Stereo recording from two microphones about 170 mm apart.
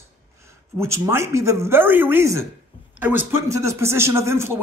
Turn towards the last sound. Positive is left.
turn(degrees=-15)  # may be behind; listen again after turning